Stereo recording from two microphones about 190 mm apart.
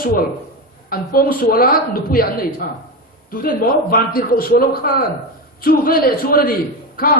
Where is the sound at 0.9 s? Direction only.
50° left (ahead or behind).